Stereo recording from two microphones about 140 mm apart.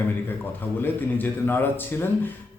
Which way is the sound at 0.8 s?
15° left (ahead or behind).